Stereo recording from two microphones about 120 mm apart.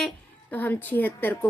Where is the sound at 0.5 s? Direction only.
15° left (ahead or behind).